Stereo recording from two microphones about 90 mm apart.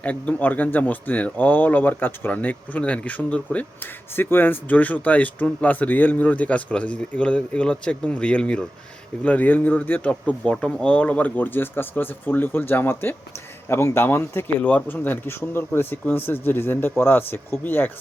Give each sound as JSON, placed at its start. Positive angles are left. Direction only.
{"t": 0.0, "sound": "speech", "side_deg": 15}